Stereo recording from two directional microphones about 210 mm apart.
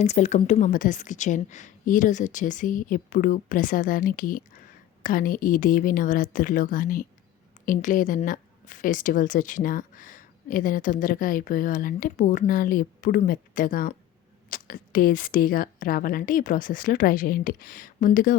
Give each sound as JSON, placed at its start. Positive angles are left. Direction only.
{"t": 0.0, "sound": "a woman's voice", "side_deg": 35}